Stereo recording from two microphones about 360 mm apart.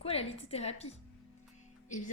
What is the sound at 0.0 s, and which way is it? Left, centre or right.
Speech, centre.